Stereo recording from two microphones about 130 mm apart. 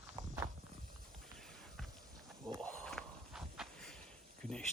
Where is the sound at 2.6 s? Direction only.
10° left (ahead or behind).